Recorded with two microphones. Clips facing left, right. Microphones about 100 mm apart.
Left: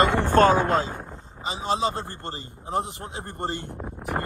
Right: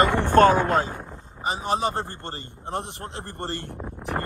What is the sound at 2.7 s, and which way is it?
Speech, 70° right (ahead or behind).